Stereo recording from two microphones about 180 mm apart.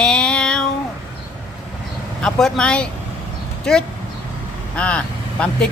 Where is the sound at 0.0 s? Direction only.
5° left (ahead or behind).